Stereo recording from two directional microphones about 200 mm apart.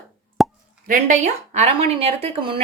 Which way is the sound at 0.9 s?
40° right (ahead or behind).